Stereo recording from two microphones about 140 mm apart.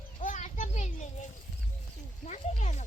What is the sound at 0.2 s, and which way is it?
Children playing, 60° left (ahead or behind).